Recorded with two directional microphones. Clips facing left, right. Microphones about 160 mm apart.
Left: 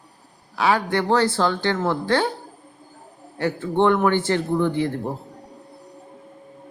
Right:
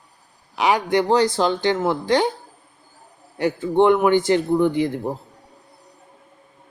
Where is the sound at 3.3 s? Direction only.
15° right (ahead or behind).